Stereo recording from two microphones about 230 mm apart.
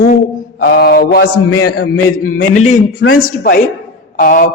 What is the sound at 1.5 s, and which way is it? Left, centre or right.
Speech, left.